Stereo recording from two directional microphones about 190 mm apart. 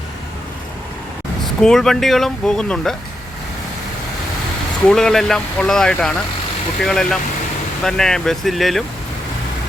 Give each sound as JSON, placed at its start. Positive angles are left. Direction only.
{"t": 1.6, "sound": "speech", "side_deg": 0}
{"t": 4.9, "sound": "speech", "side_deg": 0}